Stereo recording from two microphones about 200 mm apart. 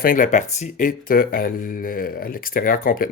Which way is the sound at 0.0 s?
40° left (ahead or behind).